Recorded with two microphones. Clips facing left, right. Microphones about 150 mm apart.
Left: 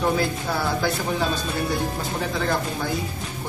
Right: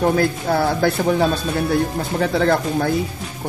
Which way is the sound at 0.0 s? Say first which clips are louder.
Right 5 dB; 50° right (ahead or behind).